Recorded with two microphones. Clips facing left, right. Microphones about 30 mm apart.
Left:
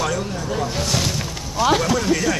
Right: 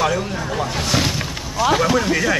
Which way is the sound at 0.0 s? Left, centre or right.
Right.